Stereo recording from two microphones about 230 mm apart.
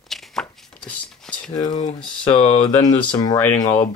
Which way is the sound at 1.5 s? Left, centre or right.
Centre.